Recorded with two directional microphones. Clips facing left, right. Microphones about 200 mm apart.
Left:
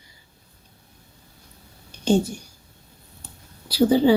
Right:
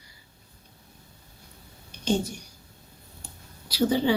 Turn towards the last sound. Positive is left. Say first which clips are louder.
# left 6 dB
turn(degrees=30)  # may be behind; listen again after turning